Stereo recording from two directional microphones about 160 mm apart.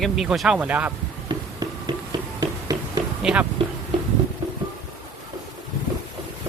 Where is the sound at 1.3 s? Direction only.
25° right (ahead or behind).